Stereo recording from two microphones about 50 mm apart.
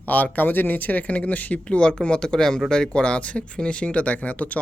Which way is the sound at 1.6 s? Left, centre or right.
Centre.